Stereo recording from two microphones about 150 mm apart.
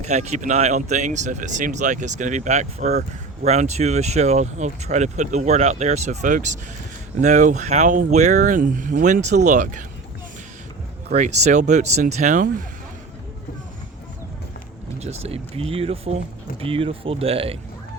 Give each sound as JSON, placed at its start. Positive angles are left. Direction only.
{"t": 0.0, "sound": "speech", "side_deg": -50}
{"t": 11.1, "sound": "speech", "side_deg": -50}
{"t": 15.0, "sound": "speech", "side_deg": -45}